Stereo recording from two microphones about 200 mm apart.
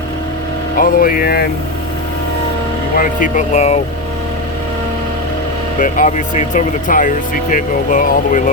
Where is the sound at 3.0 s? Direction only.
40° left (ahead or behind).